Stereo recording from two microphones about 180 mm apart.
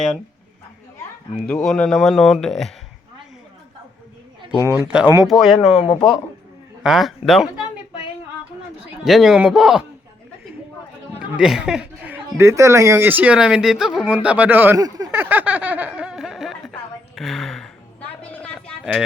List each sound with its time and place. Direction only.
1.5 s speech: 5° left (ahead or behind)
4.6 s speech: 10° right (ahead or behind)
5.8 s speech: 25° left (ahead or behind)
6.8 s speech: centre (ahead or behind)
9.0 s speech: centre (ahead or behind)
11.2 s speech: 5° right (ahead or behind)
18.2 s a sound: 5° left (ahead or behind)